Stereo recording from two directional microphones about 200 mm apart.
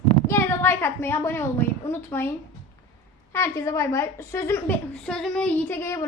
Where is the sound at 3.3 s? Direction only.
15° left (ahead or behind).